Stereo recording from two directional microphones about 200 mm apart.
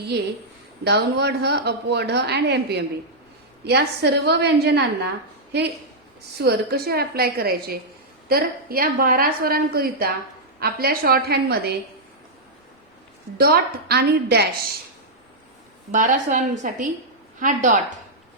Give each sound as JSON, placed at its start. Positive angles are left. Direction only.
{"t": 0.9, "sound": "a woman's voice", "side_deg": -55}
{"t": 6.4, "sound": "a woman's voice", "side_deg": -50}
{"t": 13.3, "sound": "a woman's voice", "side_deg": -50}
{"t": 15.9, "sound": "a woman's voice", "side_deg": -40}